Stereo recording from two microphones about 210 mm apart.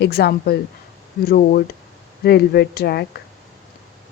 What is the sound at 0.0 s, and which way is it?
Speech, 45° left (ahead or behind).